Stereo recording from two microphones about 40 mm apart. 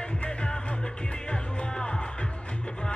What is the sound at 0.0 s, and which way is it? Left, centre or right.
Music, left.